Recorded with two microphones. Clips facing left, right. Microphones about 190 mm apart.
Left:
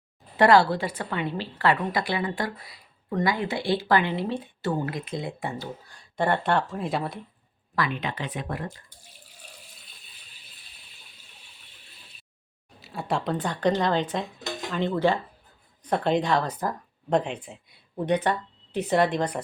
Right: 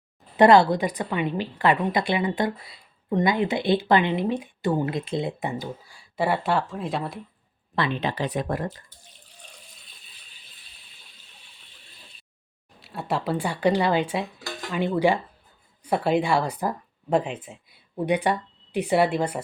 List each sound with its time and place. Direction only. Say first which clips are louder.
0.3 s a woman's voice: right 3 dB; 20° right (ahead or behind); by 7.2 s centre (ahead or behind)
7.8 s speech: right 3 dB; 30° right (ahead or behind)
12.8 s speech: right 1 dB; centre (ahead or behind)